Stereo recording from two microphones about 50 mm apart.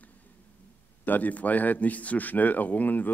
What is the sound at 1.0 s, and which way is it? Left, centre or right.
A man's voice, left.